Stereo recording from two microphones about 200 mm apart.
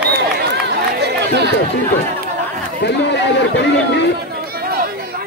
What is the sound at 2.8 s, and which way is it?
Speech, 60° left (ahead or behind).